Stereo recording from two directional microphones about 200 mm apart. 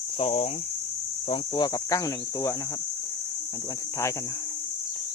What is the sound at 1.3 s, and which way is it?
Cricket, 20° left (ahead or behind).